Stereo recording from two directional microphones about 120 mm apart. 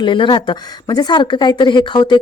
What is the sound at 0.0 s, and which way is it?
Speech, 40° left (ahead or behind).